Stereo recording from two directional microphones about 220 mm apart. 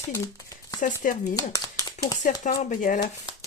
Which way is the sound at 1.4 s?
15° left (ahead or behind).